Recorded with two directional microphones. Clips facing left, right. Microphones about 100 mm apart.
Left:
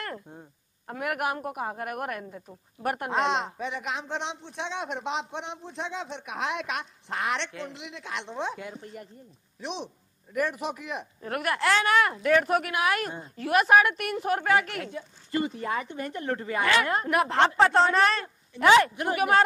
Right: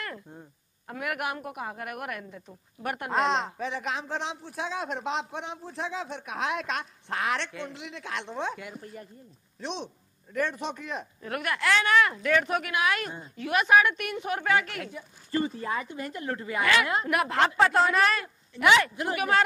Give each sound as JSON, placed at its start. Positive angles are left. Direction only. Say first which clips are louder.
{"t": 0.8, "sound": "a woman's voice", "louder": "left 3 dB", "side_deg": 40}
{"t": 3.1, "sound": "speech", "louder": "right 2 dB", "side_deg": 0}
{"t": 9.6, "sound": "a man's voice", "louder": "even", "side_deg": 0}
{"t": 11.2, "sound": "speech", "louder": "left 2 dB", "side_deg": 40}
{"t": 14.9, "sound": "speech", "louder": "left 1 dB", "side_deg": 20}